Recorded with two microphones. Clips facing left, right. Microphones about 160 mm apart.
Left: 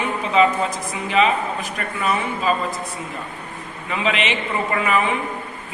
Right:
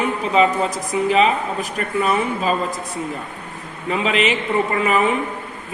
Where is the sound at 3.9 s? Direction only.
35° right (ahead or behind).